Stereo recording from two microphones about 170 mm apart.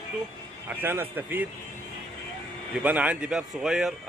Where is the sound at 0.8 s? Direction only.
10° right (ahead or behind).